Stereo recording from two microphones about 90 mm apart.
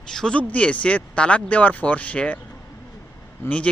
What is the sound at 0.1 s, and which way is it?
Speech, 5° left (ahead or behind).